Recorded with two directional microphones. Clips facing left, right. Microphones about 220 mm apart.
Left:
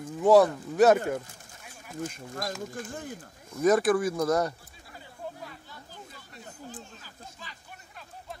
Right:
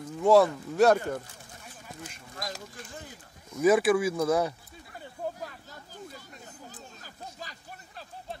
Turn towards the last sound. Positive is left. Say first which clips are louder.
# right 4 dB
turn(degrees=-40)  # may be behind; listen again after turning